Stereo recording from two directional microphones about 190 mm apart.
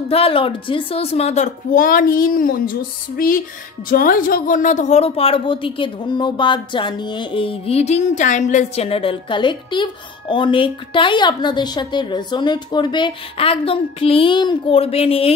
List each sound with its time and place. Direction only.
0.1 s a child's voice: 30° left (ahead or behind)